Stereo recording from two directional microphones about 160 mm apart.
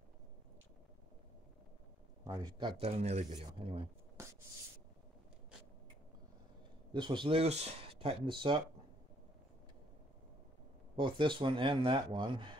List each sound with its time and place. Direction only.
2.2 s speech: 20° right (ahead or behind)
2.8 s speech: 45° right (ahead or behind)
6.9 s speech: 30° right (ahead or behind)
11.0 s speech: 30° right (ahead or behind)